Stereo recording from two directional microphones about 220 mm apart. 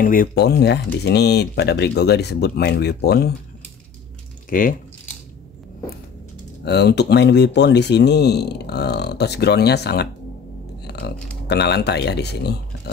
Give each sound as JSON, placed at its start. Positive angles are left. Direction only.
{"t": 0.0, "sound": "speech", "side_deg": 40}
{"t": 4.5, "sound": "speech", "side_deg": 40}
{"t": 6.6, "sound": "speech", "side_deg": 50}
{"t": 10.8, "sound": "a sound", "side_deg": 45}
{"t": 11.4, "sound": "speech", "side_deg": 50}